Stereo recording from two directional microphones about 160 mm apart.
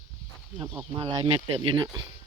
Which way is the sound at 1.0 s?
35° right (ahead or behind).